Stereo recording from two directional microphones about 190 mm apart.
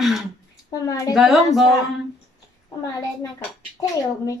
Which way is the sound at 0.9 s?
15° left (ahead or behind).